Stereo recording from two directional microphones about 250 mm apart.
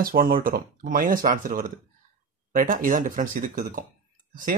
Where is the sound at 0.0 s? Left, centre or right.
Right.